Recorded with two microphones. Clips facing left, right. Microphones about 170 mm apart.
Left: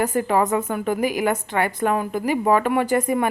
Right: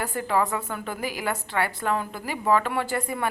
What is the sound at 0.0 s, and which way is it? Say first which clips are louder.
A woman's voice: left 5 dB; 20° left (ahead or behind).